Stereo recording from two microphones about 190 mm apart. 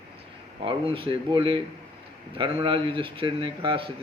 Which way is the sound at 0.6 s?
25° right (ahead or behind).